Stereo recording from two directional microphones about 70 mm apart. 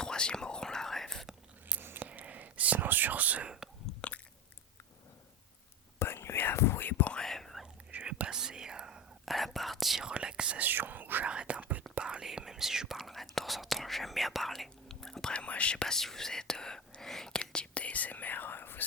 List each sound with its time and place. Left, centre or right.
0.0 s whispering: centre
1.6 s whispering: right; by 3.7 s centre
4.0 s biting: centre
6.0 s whispering: left
7.1 s whispering: centre
7.9 s whispering: centre
9.3 s whispering: centre
10.1 s whispering: centre
10.7 s whispering: right
11.3 s whispering: centre; by 18.9 s left